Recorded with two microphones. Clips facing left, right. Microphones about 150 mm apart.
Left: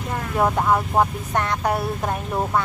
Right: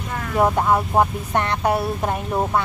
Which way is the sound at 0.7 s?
5° right (ahead or behind).